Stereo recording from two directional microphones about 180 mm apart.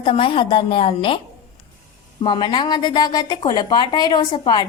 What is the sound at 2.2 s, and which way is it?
A woman's voice, 25° left (ahead or behind).